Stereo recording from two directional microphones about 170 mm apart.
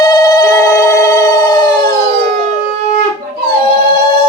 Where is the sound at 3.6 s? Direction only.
30° left (ahead or behind).